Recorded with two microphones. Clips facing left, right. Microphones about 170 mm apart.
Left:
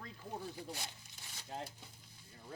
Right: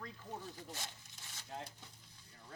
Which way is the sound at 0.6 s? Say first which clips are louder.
Left 2 dB; 10° left (ahead or behind).